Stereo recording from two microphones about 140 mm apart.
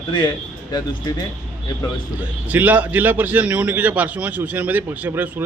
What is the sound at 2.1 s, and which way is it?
A man's voice, 10° right (ahead or behind).